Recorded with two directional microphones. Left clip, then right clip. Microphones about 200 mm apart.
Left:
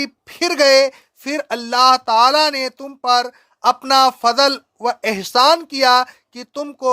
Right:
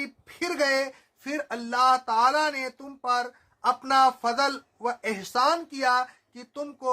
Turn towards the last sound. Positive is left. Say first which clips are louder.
# left 11 dB
turn(degrees=45)  # may be behind; listen again after turning